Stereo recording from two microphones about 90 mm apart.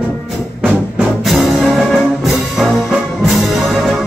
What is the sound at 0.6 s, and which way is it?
Music, 15° right (ahead or behind).